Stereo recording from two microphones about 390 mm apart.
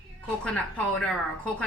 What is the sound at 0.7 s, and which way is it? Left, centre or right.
Speech, centre.